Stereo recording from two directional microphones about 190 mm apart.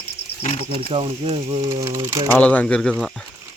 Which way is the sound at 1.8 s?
15° right (ahead or behind).